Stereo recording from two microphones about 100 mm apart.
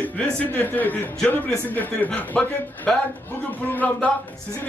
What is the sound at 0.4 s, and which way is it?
Speech, 20° left (ahead or behind).